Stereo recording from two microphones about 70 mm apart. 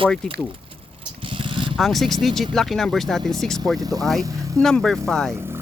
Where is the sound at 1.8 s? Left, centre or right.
Centre.